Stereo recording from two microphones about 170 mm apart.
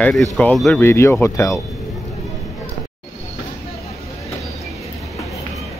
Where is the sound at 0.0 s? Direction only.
5° left (ahead or behind).